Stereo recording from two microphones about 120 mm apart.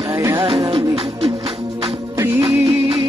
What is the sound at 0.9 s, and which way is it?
Music, 55° right (ahead or behind).